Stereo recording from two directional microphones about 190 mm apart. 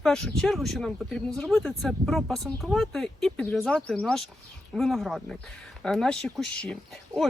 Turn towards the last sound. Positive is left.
turn(degrees=5)  # may be behind; listen again after turning